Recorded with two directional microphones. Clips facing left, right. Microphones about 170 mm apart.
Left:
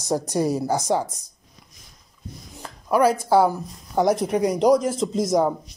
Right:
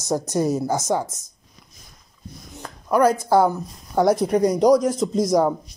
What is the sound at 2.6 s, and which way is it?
Speech, 5° left (ahead or behind).